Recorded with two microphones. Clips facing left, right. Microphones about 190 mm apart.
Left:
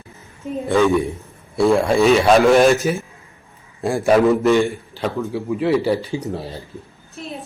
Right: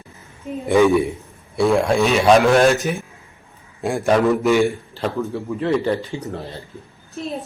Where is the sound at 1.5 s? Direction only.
Centre (ahead or behind).